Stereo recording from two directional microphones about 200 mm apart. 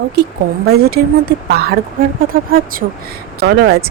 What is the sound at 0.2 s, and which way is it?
Speech, 50° right (ahead or behind).